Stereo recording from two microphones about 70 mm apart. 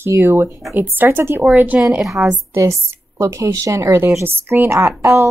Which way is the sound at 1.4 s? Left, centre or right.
Right.